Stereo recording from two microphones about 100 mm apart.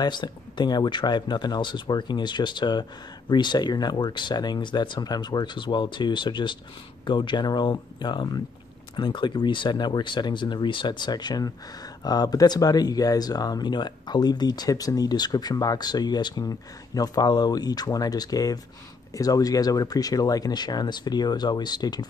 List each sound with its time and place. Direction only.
0.0 s speech: 50° left (ahead or behind)